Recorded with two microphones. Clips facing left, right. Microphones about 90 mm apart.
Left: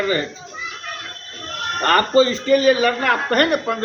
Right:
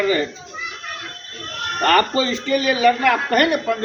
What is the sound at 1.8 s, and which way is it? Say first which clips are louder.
A man's voice: left 2 dB; 35° left (ahead or behind).